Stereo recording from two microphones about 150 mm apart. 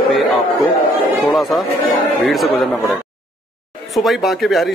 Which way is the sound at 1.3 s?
Centre (ahead or behind).